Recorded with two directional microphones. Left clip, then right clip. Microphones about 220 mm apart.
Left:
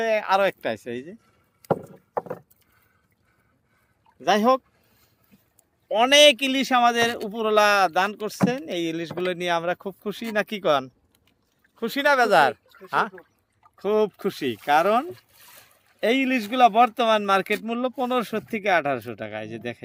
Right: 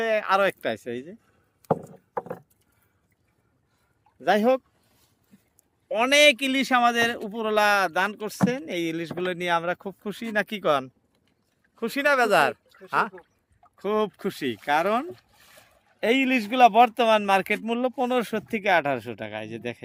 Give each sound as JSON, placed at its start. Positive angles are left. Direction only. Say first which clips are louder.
{"t": 0.0, "sound": "speech", "louder": "left 1 dB", "side_deg": -5}
{"t": 4.2, "sound": "speech", "louder": "left 2 dB", "side_deg": 0}
{"t": 5.9, "sound": "speech", "louder": "left 3 dB", "side_deg": 0}
{"t": 15.3, "sound": "a sound", "louder": "left 2 dB", "side_deg": 20}
{"t": 16.0, "sound": "speech", "louder": "even", "side_deg": -5}